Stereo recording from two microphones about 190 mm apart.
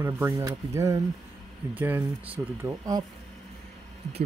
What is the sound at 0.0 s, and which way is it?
Speech, 15° right (ahead or behind).